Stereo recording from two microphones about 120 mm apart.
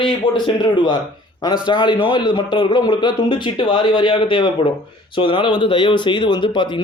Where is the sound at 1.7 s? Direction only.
45° left (ahead or behind).